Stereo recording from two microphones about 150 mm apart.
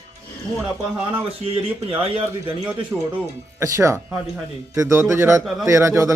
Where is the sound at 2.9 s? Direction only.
15° right (ahead or behind).